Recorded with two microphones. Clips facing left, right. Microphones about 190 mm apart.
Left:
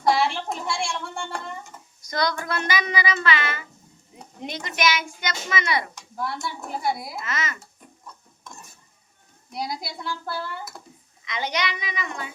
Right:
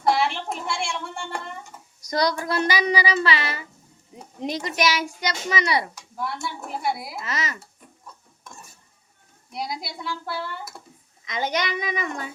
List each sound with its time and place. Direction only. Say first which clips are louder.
0.1 s a sound: even; 5° right (ahead or behind)
2.0 s speech: right 3 dB; 35° right (ahead or behind)
5.9 s speech: even; 5° right (ahead or behind)
7.2 s speech: right 1 dB; 35° right (ahead or behind)
9.5 s speech: even; centre (ahead or behind)
11.3 s a child's voice: right 2 dB; 45° right (ahead or behind)